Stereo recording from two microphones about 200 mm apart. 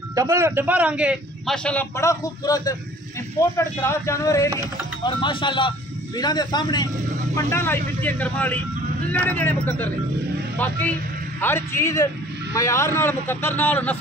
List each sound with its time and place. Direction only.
0.1 s a man's voice: 15° right (ahead or behind); by 9.8 s 10° left (ahead or behind)
11.4 s a man's voice: 10° left (ahead or behind)